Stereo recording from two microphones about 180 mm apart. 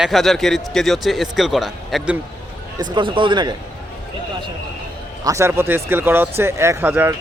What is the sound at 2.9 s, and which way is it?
Speech, 25° right (ahead or behind).